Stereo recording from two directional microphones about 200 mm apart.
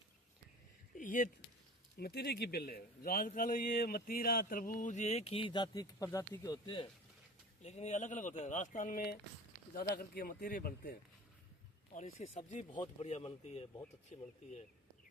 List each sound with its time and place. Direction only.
0.9 s speech: 40° left (ahead or behind)
2.0 s a man's voice: 55° left (ahead or behind); by 6.8 s 20° left (ahead or behind)
7.6 s a man's voice: 35° left (ahead or behind)
11.9 s speech: 35° left (ahead or behind)
12.7 s speech: 25° left (ahead or behind)